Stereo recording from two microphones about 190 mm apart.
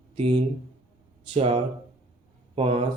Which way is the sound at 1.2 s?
30° right (ahead or behind).